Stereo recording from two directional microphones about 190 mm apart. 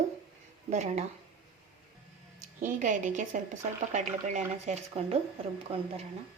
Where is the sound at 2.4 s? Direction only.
40° right (ahead or behind).